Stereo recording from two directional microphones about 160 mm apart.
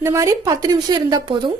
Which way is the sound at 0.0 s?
20° right (ahead or behind).